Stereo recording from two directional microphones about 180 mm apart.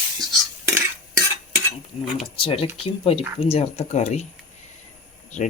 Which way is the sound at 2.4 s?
30° left (ahead or behind).